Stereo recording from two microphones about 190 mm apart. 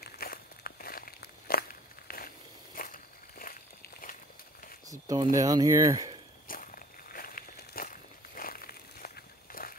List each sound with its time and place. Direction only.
0.0 s a sound: 50° left (ahead or behind)
5.0 s speech: 20° right (ahead or behind)
6.4 s walk: 50° left (ahead or behind)